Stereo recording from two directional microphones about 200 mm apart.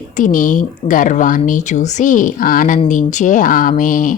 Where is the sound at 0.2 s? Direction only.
40° left (ahead or behind).